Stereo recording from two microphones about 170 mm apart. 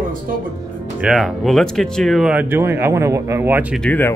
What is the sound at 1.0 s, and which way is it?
Speech, centre (ahead or behind).